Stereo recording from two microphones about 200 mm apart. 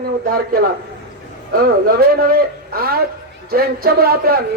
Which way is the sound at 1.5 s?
50° right (ahead or behind).